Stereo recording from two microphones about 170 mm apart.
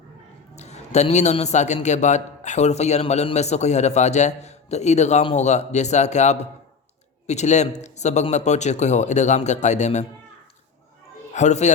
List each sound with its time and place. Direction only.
0.5 s a man's voice: 40° left (ahead or behind)
11.3 s a man's voice: 45° left (ahead or behind)